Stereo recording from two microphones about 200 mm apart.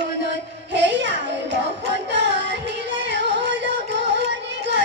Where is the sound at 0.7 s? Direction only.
60° right (ahead or behind).